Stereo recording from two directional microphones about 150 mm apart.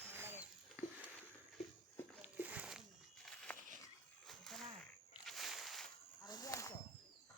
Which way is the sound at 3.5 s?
10° left (ahead or behind).